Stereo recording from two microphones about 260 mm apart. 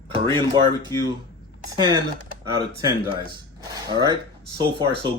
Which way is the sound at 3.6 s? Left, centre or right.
Centre.